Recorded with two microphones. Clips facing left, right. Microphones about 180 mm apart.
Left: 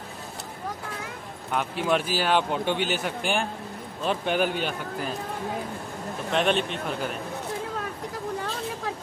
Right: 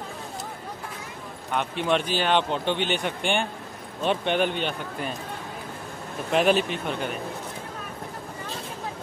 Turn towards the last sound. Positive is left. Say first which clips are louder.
# right 1 dB
turn(degrees=0)  # may be behind; listen again after turning